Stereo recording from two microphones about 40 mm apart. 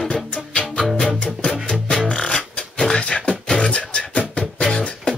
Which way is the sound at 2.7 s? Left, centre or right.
Left.